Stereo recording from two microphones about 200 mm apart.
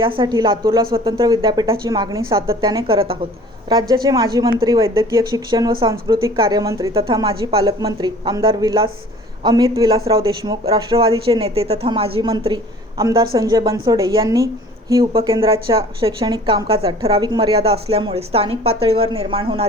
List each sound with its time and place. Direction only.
0.2 s a woman's voice: 20° right (ahead or behind)
11.1 s a woman's voice: 20° right (ahead or behind)
11.4 s a woman's voice: 30° right (ahead or behind)